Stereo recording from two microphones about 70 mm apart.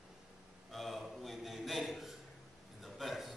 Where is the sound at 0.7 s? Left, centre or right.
Centre.